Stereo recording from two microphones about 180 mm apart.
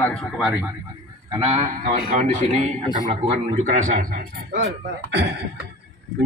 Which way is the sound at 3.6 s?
50° right (ahead or behind).